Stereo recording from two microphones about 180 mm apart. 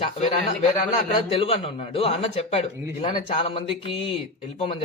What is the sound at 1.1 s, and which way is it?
A man's voice, 30° left (ahead or behind).